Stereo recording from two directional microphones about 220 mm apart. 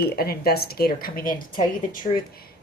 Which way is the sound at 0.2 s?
45° left (ahead or behind).